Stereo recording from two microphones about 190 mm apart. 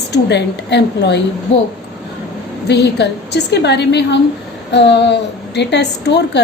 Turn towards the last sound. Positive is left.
turn(degrees=65)  # may be behind; listen again after turning